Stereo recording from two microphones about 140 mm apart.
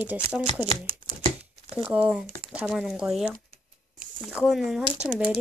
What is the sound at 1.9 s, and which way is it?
Speech, 10° right (ahead or behind).